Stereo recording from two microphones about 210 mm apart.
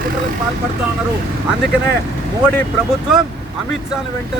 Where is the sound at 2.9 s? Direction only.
5° right (ahead or behind).